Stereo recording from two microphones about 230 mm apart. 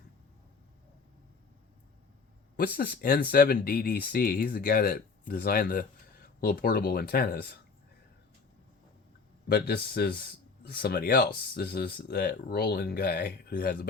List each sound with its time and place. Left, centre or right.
2.7 s speech: left
9.5 s speech: left